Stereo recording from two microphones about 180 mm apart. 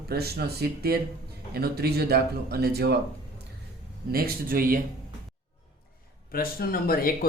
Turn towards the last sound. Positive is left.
turn(degrees=55)  # may be behind; listen again after turning